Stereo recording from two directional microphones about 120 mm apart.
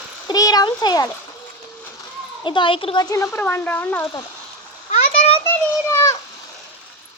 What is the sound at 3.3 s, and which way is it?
Speech, 15° left (ahead or behind).